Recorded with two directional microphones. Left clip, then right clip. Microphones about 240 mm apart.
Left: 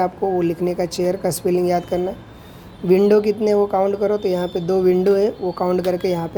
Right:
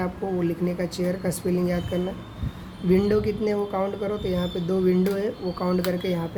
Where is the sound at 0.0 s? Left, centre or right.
Left.